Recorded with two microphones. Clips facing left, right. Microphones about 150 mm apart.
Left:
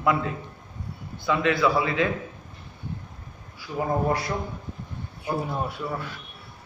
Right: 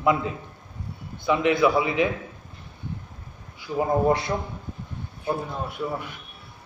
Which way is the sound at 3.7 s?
25° right (ahead or behind).